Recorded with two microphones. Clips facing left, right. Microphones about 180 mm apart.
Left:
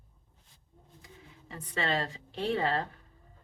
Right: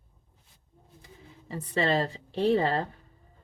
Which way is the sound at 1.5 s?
35° right (ahead or behind).